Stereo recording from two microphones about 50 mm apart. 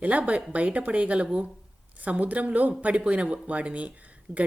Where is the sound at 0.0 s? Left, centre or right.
Right.